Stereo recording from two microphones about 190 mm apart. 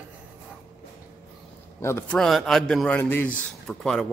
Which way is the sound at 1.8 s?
15° left (ahead or behind).